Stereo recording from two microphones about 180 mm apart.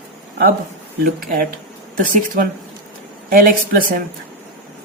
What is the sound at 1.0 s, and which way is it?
Speech, 55° right (ahead or behind).